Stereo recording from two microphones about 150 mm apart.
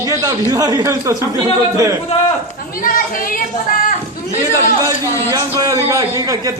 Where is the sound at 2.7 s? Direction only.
70° left (ahead or behind).